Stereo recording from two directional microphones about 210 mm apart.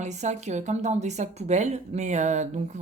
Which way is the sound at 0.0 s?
35° right (ahead or behind).